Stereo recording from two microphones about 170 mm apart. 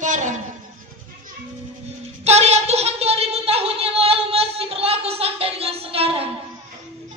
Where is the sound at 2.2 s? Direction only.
40° right (ahead or behind).